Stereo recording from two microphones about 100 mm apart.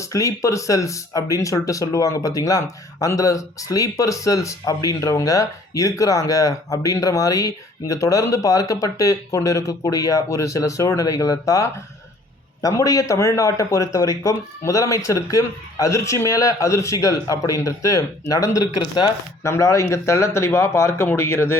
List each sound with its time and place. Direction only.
0.0 s speech: 35° left (ahead or behind)
18.8 s speech: 50° left (ahead or behind)
19.4 s speech: 30° left (ahead or behind)